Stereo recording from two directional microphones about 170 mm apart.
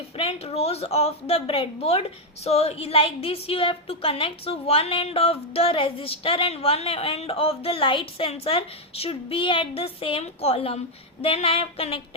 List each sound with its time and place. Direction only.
0.2 s a woman's voice: 35° left (ahead or behind)